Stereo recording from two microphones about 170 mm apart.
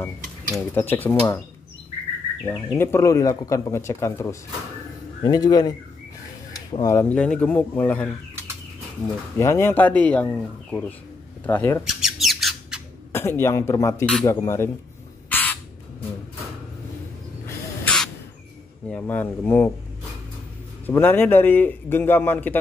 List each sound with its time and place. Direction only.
0.7 s speech: 10° left (ahead or behind)
2.4 s speech: 15° left (ahead or behind)
11.8 s squawk: 5° right (ahead or behind)
13.1 s speech: 15° left (ahead or behind)
15.2 s squawk: 10° left (ahead or behind)
17.8 s crow: 5° left (ahead or behind)
18.9 s speech: 10° left (ahead or behind)
20.8 s speech: 10° left (ahead or behind)